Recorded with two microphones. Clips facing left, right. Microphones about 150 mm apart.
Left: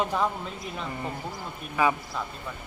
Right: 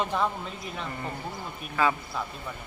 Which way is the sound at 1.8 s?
15° left (ahead or behind).